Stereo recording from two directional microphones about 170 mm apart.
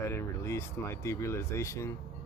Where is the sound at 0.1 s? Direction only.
15° left (ahead or behind).